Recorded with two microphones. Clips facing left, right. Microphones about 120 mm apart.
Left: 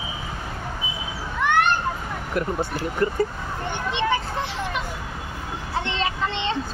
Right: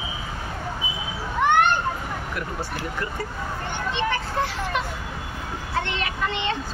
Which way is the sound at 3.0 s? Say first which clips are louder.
Left 13 dB; 35° left (ahead or behind).